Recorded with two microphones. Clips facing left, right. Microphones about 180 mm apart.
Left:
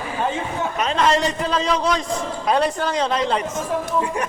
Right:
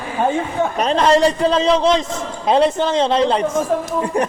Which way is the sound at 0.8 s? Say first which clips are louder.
Right 5 dB; 35° right (ahead or behind).